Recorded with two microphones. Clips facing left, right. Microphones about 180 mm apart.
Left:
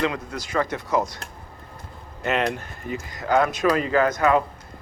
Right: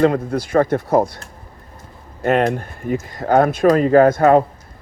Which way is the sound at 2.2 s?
50° right (ahead or behind).